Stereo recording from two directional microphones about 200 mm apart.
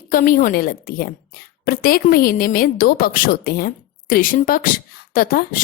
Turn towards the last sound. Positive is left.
turn(degrees=45)  # may be behind; listen again after turning